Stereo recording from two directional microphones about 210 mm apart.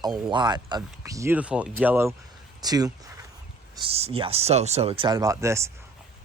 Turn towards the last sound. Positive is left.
turn(degrees=-15)  # may be behind; listen again after turning